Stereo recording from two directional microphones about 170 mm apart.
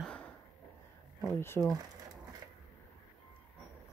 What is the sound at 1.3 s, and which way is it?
Speech, 15° left (ahead or behind).